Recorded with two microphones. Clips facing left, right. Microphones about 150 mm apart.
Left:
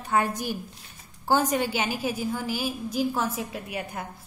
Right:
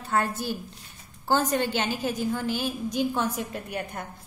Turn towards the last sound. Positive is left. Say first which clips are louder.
# even
turn(degrees=5)  # may be behind; listen again after turning